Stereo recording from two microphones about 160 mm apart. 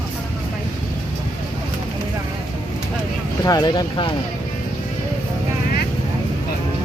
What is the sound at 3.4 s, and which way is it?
Speech, 20° left (ahead or behind).